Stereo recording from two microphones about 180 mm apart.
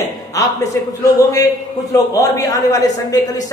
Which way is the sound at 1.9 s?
20° left (ahead or behind).